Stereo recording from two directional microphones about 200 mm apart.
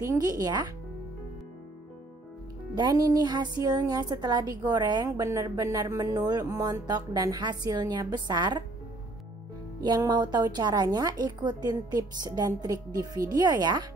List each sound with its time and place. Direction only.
0.0 s a woman's voice: 15° right (ahead or behind)
2.7 s a woman's voice: 20° right (ahead or behind)
9.8 s a woman's voice: 20° right (ahead or behind)